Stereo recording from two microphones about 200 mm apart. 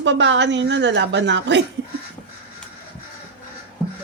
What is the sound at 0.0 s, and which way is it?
Speech, 65° right (ahead or behind).